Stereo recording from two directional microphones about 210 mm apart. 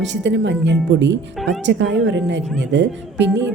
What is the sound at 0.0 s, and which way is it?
Speech, 60° right (ahead or behind).